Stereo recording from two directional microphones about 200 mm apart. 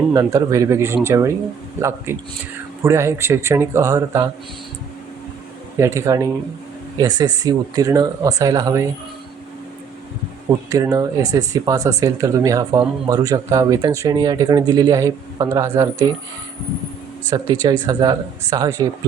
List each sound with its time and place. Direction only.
0.1 s speech: 15° right (ahead or behind)
5.7 s speech: 15° right (ahead or behind)
10.7 s speech: 15° right (ahead or behind)
17.2 s speech: 20° right (ahead or behind)